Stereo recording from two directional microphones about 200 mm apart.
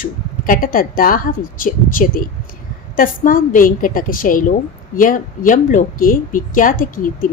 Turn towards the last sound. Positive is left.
turn(degrees=45)  # may be behind; listen again after turning